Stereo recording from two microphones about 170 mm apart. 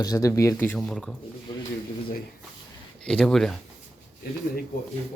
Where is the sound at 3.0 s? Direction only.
5° left (ahead or behind).